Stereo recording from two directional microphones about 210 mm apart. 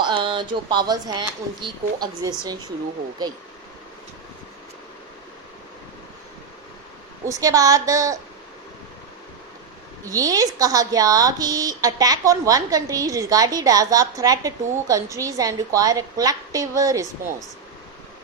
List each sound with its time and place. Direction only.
0.0 s speech: 20° right (ahead or behind)
7.3 s speech: 15° right (ahead or behind)
10.0 s speech: 15° right (ahead or behind)